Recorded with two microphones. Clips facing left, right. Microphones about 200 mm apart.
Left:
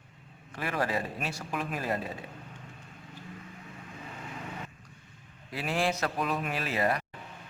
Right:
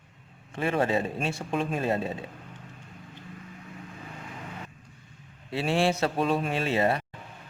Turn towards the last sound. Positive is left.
turn(degrees=-25)  # may be behind; listen again after turning